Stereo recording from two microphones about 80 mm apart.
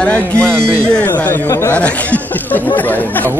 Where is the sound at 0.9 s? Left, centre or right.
Centre.